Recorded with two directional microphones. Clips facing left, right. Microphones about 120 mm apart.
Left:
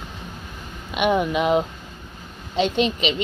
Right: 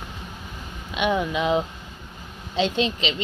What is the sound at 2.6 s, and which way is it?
Speech, 15° left (ahead or behind).